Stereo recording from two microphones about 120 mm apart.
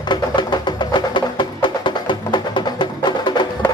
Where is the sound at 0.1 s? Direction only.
40° left (ahead or behind).